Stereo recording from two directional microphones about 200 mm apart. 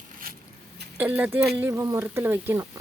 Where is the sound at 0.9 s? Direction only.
10° right (ahead or behind).